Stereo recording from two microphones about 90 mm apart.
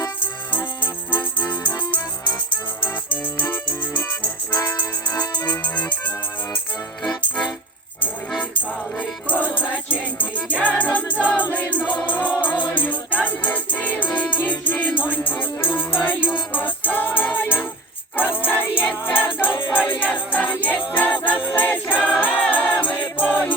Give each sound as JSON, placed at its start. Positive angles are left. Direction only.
{"t": 0.2, "sound": "music", "side_deg": 20}
{"t": 5.1, "sound": "music", "side_deg": 55}
{"t": 5.5, "sound": "music", "side_deg": 15}
{"t": 9.7, "sound": "music", "side_deg": 15}